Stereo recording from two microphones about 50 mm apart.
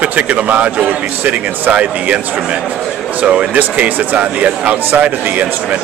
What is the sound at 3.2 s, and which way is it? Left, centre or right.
Speech, right.